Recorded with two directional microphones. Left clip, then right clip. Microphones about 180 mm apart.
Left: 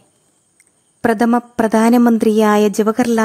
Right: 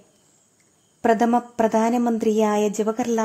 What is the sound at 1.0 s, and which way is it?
A woman's voice, 25° left (ahead or behind).